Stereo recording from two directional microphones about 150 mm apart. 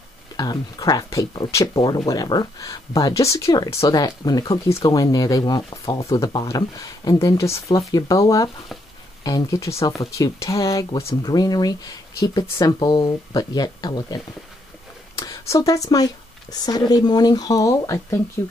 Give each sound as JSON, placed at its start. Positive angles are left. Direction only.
{"t": 0.4, "sound": "speech", "side_deg": 25}
{"t": 15.2, "sound": "speech", "side_deg": 20}